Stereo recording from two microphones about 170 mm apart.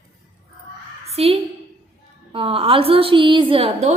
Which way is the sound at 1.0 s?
35° right (ahead or behind).